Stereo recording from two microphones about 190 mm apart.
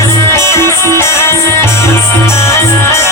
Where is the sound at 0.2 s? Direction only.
15° left (ahead or behind).